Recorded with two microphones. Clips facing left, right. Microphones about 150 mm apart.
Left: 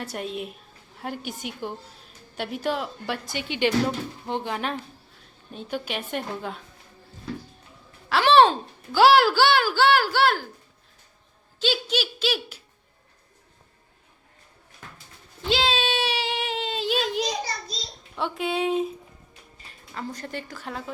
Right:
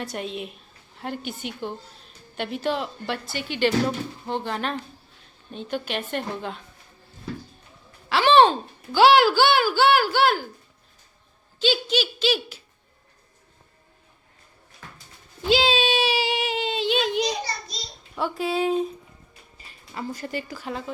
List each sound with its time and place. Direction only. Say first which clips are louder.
0.0 s a woman's voice: even; 5° left (ahead or behind)
3.2 s a woman's voice: right 1 dB; 20° left (ahead or behind)
8.1 s a child's voice: right 1 dB; centre (ahead or behind)
11.6 s speech: right 3 dB; 5° left (ahead or behind)
15.4 s child singing: right 4 dB; 5° right (ahead or behind)
18.2 s speech: right 2 dB; centre (ahead or behind)